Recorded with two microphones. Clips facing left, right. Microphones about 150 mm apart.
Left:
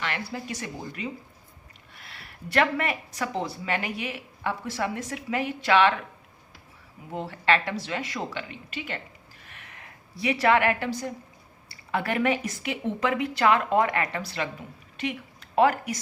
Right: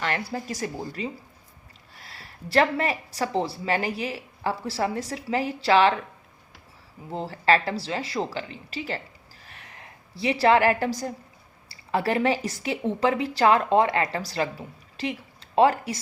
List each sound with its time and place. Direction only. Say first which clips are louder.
0.0 s speech: right 4 dB; 40° right (ahead or behind)
7.1 s speech: right 3 dB; 30° right (ahead or behind)
9.4 s a sound: right 2 dB; 35° right (ahead or behind)
11.7 s a woman's voice: right 3 dB; 30° right (ahead or behind)